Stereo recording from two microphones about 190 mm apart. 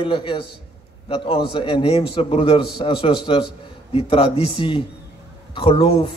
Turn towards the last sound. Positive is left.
turn(degrees=30)  # may be behind; listen again after turning